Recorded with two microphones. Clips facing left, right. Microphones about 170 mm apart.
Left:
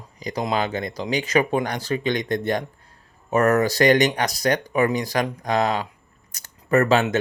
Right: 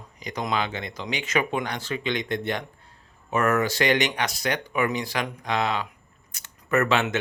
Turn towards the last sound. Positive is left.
turn(degrees=35)  # may be behind; listen again after turning